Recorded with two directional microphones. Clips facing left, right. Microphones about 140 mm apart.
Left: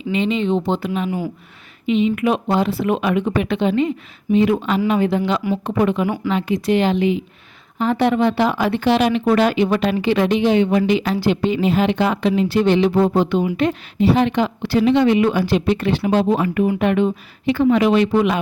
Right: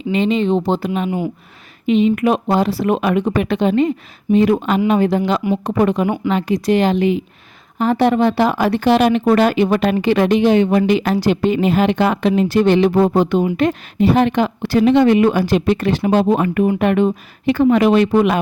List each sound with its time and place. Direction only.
0.1 s a woman's voice: 40° right (ahead or behind)